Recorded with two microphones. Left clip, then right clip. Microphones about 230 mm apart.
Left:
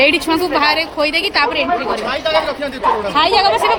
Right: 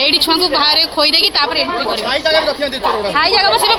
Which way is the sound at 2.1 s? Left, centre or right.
Right.